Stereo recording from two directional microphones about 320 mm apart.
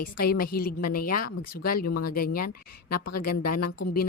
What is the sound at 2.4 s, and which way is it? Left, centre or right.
Speech, left.